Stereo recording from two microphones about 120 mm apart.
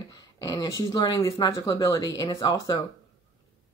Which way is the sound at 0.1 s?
30° left (ahead or behind).